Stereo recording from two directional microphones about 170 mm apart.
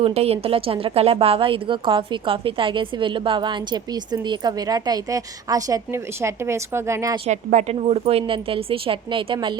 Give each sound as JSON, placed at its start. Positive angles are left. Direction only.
{"t": 0.0, "sound": "a woman's voice", "side_deg": -35}
{"t": 7.3, "sound": "a woman's voice", "side_deg": -40}